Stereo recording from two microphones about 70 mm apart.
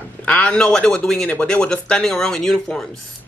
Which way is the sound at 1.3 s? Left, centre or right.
Centre.